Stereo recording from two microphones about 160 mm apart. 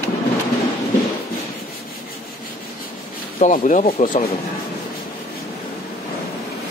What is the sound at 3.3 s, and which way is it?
Speech, 55° left (ahead or behind).